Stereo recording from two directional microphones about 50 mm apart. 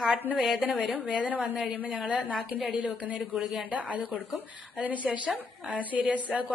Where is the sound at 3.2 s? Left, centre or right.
Centre.